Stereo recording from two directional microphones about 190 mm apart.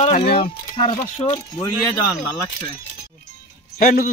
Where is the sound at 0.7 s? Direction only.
30° left (ahead or behind).